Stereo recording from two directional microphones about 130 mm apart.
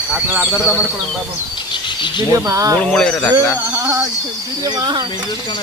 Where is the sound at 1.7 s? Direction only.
35° left (ahead or behind).